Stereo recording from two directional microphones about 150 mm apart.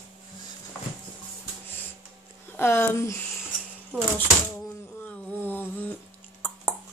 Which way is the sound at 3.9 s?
15° right (ahead or behind).